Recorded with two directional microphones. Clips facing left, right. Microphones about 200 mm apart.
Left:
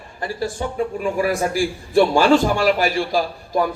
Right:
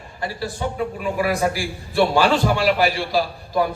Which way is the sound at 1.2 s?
45° left (ahead or behind).